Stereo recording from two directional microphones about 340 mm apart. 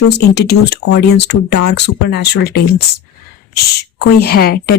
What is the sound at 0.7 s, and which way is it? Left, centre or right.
Speech, left.